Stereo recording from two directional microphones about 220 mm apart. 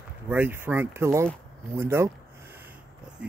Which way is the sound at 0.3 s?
10° right (ahead or behind).